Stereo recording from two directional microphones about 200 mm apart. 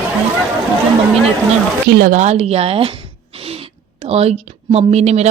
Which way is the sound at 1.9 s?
40° right (ahead or behind).